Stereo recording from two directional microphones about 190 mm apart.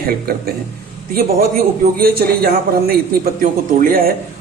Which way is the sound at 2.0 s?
50° right (ahead or behind).